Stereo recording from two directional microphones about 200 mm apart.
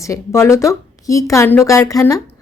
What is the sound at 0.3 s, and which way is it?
Speech, 15° left (ahead or behind).